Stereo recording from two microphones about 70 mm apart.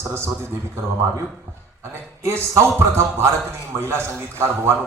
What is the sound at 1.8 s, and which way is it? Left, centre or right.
A man's voice, right.